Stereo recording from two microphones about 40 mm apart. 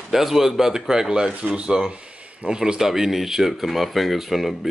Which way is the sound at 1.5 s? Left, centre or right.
Centre.